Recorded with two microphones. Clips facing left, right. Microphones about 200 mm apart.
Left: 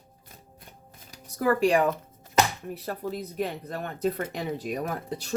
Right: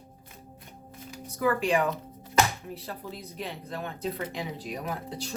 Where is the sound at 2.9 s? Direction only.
50° left (ahead or behind).